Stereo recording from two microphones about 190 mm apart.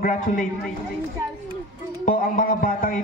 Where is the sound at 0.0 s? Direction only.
45° left (ahead or behind).